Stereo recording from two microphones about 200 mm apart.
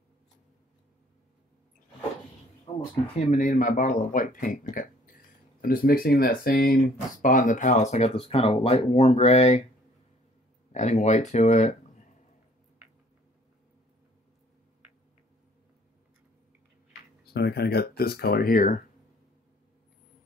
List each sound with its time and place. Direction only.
2.7 s a sound: 20° left (ahead or behind)
3.2 s speech: 35° left (ahead or behind)
10.7 s speech: 35° left (ahead or behind)
17.2 s speech: 55° left (ahead or behind)